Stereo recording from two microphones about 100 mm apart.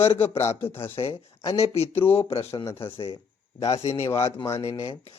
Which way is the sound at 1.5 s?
90° left.